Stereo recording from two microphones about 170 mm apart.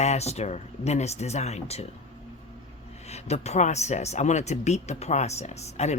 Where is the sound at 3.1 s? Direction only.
40° left (ahead or behind).